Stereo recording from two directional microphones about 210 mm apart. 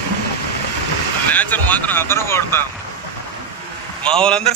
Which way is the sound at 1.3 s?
10° left (ahead or behind).